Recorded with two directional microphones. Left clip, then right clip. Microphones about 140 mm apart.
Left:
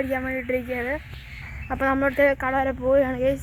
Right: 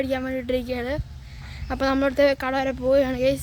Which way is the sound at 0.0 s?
35° right (ahead or behind).